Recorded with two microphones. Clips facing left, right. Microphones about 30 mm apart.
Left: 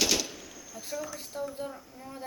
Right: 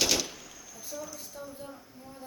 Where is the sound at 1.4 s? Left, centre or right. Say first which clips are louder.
Left 7 dB; left.